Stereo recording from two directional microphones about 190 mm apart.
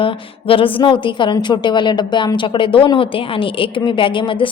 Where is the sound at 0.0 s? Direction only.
25° left (ahead or behind).